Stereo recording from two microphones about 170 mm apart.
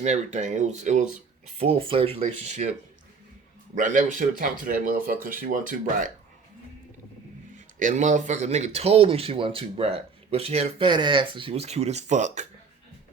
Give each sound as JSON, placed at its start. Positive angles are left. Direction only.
{"t": 0.0, "sound": "speech", "side_deg": -45}
{"t": 3.8, "sound": "speech", "side_deg": -50}
{"t": 7.8, "sound": "speech", "side_deg": -45}